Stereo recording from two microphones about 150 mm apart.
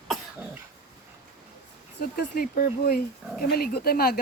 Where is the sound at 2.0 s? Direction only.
90° left.